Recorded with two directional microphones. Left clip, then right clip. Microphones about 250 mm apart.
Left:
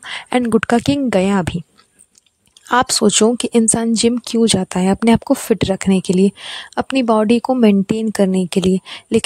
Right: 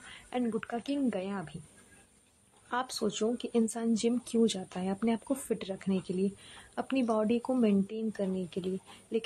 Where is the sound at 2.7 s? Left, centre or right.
Left.